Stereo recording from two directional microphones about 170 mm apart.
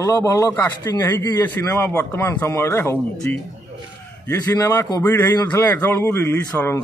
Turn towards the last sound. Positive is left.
turn(degrees=10)  # may be behind; listen again after turning